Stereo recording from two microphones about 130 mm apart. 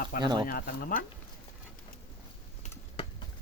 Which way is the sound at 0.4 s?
90° left.